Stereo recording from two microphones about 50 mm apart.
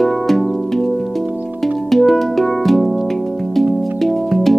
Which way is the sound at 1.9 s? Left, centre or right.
Centre.